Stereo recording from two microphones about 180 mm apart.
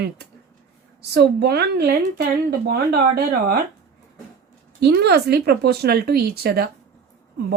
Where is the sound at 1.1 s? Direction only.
65° right (ahead or behind).